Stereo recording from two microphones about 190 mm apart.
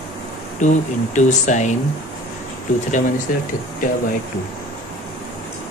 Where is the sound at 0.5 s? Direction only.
40° left (ahead or behind).